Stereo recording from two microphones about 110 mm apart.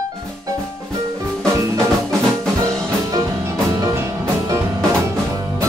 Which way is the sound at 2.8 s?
30° right (ahead or behind).